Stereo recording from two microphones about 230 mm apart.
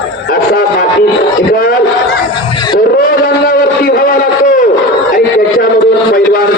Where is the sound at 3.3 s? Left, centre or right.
Left.